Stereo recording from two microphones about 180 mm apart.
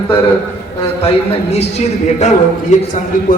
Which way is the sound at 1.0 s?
35° left (ahead or behind).